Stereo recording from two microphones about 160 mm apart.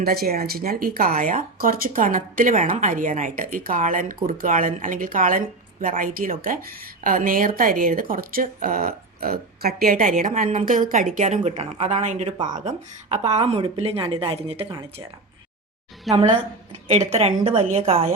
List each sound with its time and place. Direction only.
0.0 s speech: 70° right (ahead or behind); by 14.7 s 35° right (ahead or behind)
16.1 s a woman's voice: 45° right (ahead or behind)